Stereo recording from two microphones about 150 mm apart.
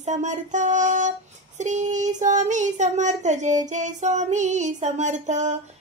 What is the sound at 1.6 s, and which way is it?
Speech, 55° right (ahead or behind).